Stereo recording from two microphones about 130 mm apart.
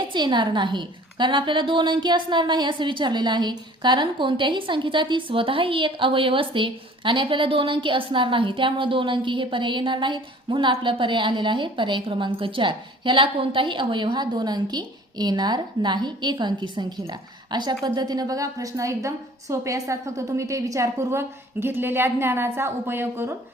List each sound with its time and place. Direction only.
0.0 s a woman's voice: 40° right (ahead or behind); by 23.3 s 20° right (ahead or behind)